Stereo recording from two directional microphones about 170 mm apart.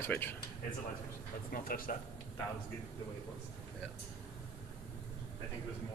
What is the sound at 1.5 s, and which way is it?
Speech, 55° left (ahead or behind).